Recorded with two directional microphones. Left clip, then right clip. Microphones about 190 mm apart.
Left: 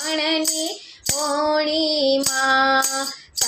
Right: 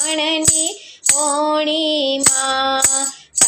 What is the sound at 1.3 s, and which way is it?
Female singing, 25° right (ahead or behind).